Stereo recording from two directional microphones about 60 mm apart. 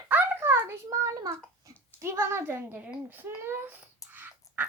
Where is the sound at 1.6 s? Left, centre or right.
Right.